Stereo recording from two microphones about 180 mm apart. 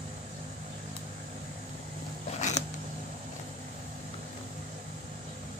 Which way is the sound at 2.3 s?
40° left (ahead or behind).